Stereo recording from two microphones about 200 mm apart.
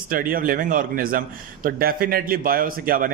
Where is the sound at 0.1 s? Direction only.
45° right (ahead or behind).